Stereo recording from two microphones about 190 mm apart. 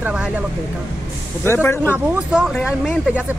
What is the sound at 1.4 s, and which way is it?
Speech, 10° left (ahead or behind).